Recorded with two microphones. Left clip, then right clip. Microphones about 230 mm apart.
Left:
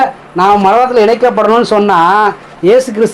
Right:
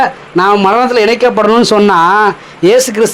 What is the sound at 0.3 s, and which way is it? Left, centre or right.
Speech, right.